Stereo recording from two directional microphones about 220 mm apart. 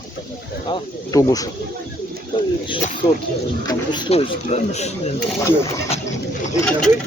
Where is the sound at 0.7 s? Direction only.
15° left (ahead or behind).